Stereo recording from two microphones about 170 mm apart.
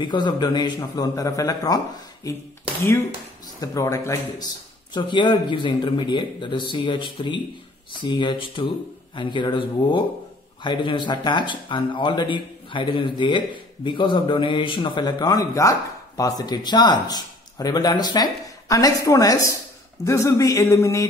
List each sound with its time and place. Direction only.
0.0 s speech: 25° left (ahead or behind)
3.6 s speech: 20° left (ahead or behind)
20.1 s a sound: 15° left (ahead or behind)